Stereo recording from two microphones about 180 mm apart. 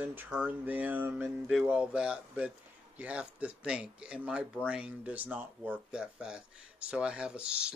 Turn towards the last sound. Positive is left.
turn(degrees=-5)  # may be behind; listen again after turning